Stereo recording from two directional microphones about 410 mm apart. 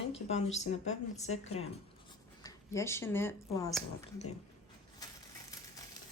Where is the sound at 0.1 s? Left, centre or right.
Centre.